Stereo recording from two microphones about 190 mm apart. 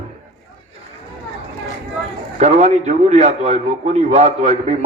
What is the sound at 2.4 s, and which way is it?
A man's voice, 35° right (ahead or behind).